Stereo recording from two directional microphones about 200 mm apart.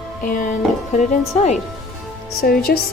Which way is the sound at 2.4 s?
50° left (ahead or behind).